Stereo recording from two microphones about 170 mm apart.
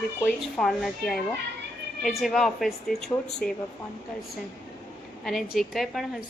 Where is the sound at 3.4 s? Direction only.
60° left (ahead or behind).